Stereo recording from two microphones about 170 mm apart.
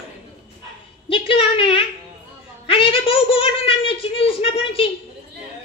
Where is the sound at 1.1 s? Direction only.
30° left (ahead or behind).